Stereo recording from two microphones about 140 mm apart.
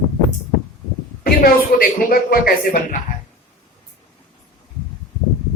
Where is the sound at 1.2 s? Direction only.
90° left.